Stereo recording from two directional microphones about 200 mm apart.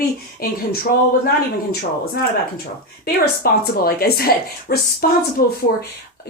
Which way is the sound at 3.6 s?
50° left (ahead or behind).